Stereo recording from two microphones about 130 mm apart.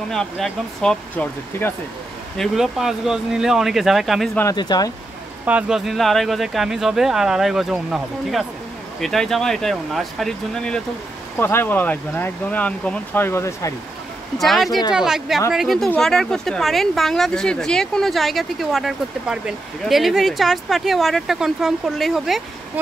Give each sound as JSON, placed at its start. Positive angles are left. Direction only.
{"t": 0.1, "sound": "speech", "side_deg": 5}
{"t": 2.3, "sound": "speech", "side_deg": 0}
{"t": 4.6, "sound": "speech", "side_deg": 30}
{"t": 5.4, "sound": "speech", "side_deg": -10}
{"t": 11.3, "sound": "speech", "side_deg": 15}
{"t": 14.4, "sound": "speech", "side_deg": 0}